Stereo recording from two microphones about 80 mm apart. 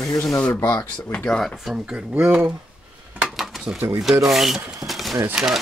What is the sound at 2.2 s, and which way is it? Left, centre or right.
Speech, centre.